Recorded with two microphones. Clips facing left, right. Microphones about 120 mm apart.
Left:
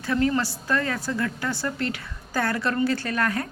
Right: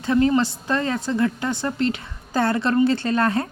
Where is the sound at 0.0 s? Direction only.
25° right (ahead or behind).